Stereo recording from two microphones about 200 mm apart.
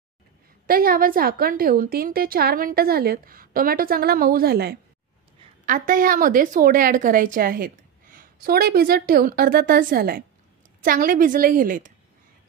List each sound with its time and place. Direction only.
0.7 s speech: 45° right (ahead or behind)